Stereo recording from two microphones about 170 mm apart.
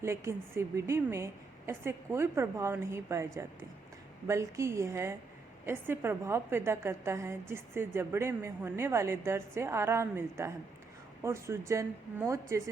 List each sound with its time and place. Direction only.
0.0 s a woman's voice: 15° right (ahead or behind)